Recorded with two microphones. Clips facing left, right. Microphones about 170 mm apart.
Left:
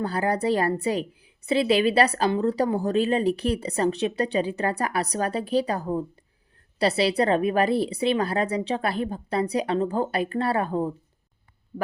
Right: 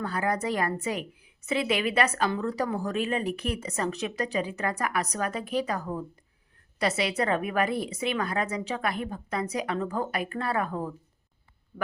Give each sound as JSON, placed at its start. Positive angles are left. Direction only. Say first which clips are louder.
{"t": 0.0, "sound": "a woman's voice", "louder": "left 4 dB", "side_deg": 30}